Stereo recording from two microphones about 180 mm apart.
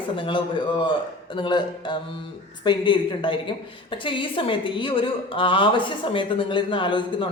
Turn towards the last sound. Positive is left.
turn(degrees=25)  # may be behind; listen again after turning